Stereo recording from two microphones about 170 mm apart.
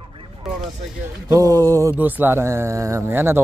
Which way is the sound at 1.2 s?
20° right (ahead or behind).